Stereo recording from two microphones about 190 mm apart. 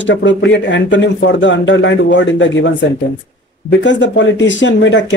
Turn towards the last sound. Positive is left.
turn(degrees=70)  # may be behind; listen again after turning